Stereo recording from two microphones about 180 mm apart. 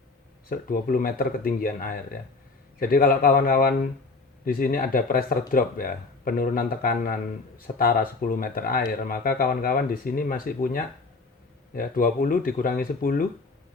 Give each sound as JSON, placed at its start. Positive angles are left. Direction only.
{"t": 0.5, "sound": "speech", "side_deg": 55}